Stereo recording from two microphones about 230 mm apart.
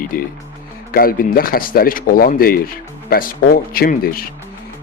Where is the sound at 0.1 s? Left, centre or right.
Left.